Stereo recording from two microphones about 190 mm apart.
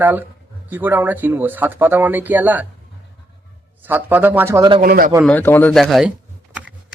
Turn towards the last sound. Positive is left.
turn(degrees=0)  # may be behind; listen again after turning